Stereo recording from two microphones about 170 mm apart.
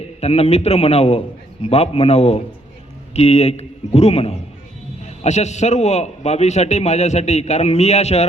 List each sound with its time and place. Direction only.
0.2 s a man's voice: 40° left (ahead or behind)